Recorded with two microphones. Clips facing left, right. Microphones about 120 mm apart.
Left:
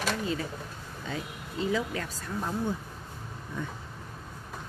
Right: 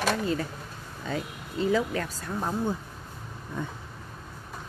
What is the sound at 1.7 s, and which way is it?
Speech, 45° right (ahead or behind).